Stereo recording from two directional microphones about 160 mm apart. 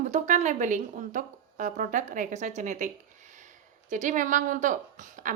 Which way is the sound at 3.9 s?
50° right (ahead or behind).